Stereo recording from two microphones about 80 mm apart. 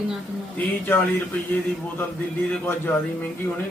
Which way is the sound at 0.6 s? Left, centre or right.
Centre.